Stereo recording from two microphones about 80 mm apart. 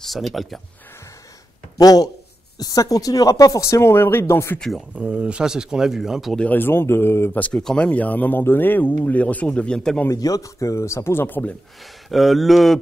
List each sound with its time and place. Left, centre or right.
0.0 s speech: centre
1.8 s speech: left
4.6 s speech: centre
4.9 s speech: centre
6.3 s speech: centre
7.3 s speech: centre
10.1 s speech: left
12.1 s speech: centre